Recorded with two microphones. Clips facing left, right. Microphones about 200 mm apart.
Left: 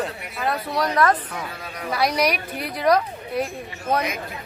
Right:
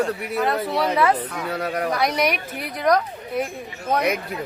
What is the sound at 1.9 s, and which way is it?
A man's voice, centre (ahead or behind).